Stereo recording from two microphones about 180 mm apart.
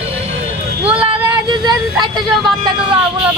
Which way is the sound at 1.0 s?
30° right (ahead or behind).